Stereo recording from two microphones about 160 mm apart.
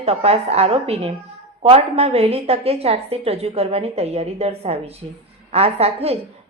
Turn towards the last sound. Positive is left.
turn(degrees=-40)  # may be behind; listen again after turning